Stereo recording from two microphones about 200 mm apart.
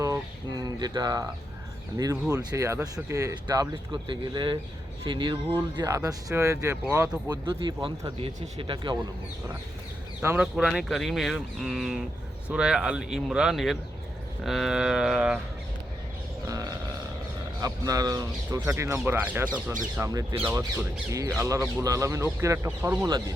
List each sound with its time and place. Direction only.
0.0 s a sound: 15° right (ahead or behind)
2.3 s speech: 20° right (ahead or behind)
7.4 s speech: 25° right (ahead or behind)
10.2 s speech: 5° right (ahead or behind)
16.5 s a sound: 15° right (ahead or behind)
17.6 s speech: 20° right (ahead or behind)